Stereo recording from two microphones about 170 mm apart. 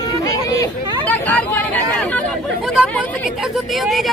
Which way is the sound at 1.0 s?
10° left (ahead or behind).